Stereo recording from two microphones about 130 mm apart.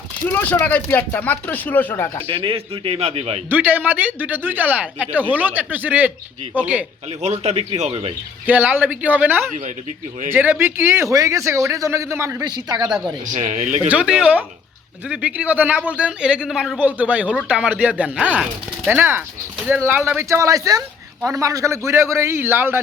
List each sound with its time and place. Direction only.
0.3 s speech: 15° left (ahead or behind)
2.2 s a man's voice: 45° right (ahead or behind)
3.5 s speech: 15° right (ahead or behind)
7.2 s speech: 55° right (ahead or behind)
8.4 s a man's voice: 15° right (ahead or behind); by 12.9 s 30° right (ahead or behind)
13.3 s speech: 70° right (ahead or behind)
13.8 s a man's voice: 10° right (ahead or behind)